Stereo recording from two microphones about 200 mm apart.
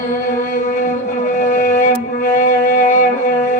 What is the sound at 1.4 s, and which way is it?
Music, 40° left (ahead or behind).